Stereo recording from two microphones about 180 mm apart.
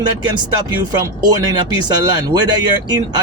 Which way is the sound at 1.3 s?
20° right (ahead or behind).